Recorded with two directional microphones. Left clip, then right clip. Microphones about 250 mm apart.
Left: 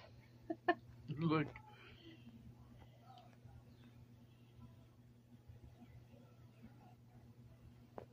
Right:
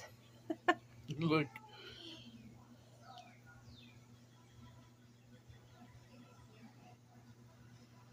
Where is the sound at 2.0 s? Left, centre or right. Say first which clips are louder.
Right 9 dB; right.